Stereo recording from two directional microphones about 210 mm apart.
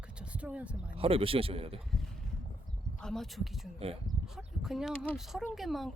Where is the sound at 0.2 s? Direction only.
5° right (ahead or behind).